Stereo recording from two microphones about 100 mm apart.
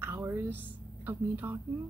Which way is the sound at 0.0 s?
25° right (ahead or behind).